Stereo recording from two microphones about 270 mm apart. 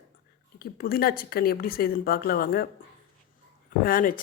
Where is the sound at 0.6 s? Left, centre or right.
Left.